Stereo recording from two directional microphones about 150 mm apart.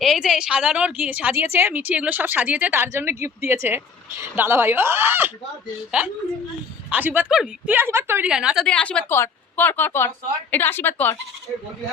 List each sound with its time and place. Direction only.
0.0 s a woman's voice: centre (ahead or behind)
6.9 s a woman's voice: 10° right (ahead or behind)
8.3 s a woman's voice: 5° right (ahead or behind)
8.6 s a woman's voice: 5° left (ahead or behind)